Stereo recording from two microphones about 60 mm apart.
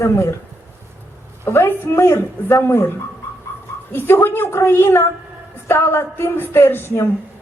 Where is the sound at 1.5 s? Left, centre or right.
Left.